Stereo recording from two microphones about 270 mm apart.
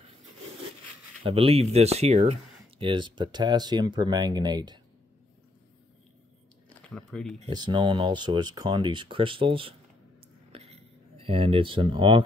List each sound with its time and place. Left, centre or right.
1.2 s speech: right
6.9 s speech: centre
7.3 s speech: centre
10.5 s a sound: right